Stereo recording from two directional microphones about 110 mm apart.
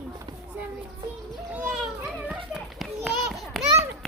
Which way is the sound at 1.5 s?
15° right (ahead or behind).